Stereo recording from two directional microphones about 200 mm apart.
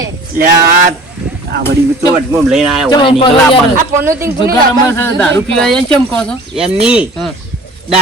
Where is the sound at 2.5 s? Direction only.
Centre (ahead or behind).